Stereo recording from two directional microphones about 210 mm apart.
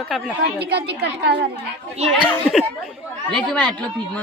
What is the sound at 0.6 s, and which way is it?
Speech, 50° right (ahead or behind).